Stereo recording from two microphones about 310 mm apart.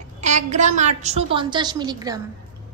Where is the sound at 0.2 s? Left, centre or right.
Right.